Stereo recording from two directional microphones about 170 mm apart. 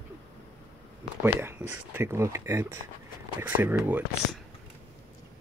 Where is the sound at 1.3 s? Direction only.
10° right (ahead or behind).